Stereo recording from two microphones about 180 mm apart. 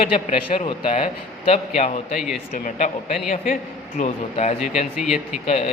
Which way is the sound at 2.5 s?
45° left (ahead or behind).